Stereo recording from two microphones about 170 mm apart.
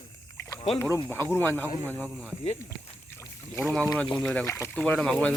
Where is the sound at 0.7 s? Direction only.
15° left (ahead or behind).